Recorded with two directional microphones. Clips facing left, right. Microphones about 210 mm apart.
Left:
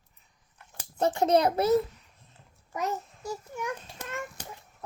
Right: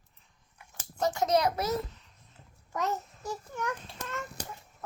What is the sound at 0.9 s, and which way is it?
Speech, 30° left (ahead or behind).